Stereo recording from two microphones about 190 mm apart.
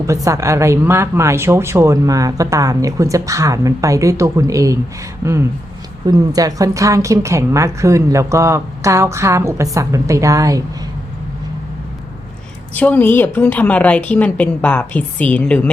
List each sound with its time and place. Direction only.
0.0 s a woman's voice: 15° right (ahead or behind)
12.7 s a woman's voice: 10° left (ahead or behind)